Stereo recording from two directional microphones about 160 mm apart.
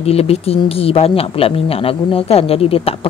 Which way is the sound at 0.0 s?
40° left (ahead or behind).